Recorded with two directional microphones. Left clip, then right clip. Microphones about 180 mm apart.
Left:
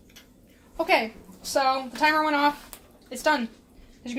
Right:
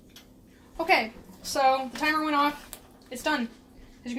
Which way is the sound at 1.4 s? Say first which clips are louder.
Even; 30° left (ahead or behind).